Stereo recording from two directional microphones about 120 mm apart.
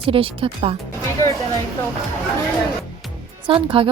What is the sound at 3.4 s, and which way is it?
Speech, 45° right (ahead or behind).